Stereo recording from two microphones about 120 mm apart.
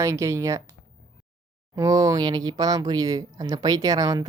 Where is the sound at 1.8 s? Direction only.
30° right (ahead or behind).